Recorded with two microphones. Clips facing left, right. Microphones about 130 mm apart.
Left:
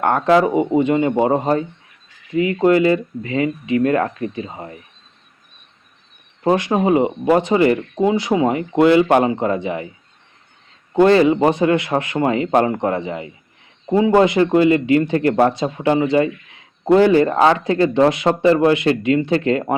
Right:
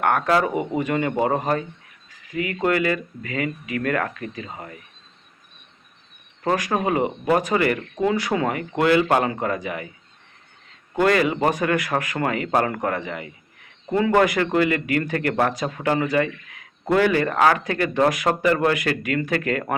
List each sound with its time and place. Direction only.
0.0 s speech: 25° left (ahead or behind)
6.4 s speech: 25° left (ahead or behind)
11.0 s speech: 25° left (ahead or behind)
13.9 s speech: 15° left (ahead or behind)